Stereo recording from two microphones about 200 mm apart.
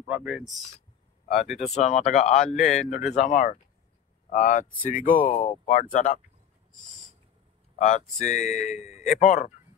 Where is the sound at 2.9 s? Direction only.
35° left (ahead or behind).